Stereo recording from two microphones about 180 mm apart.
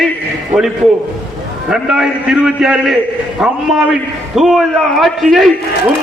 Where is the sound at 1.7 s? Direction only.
5° right (ahead or behind).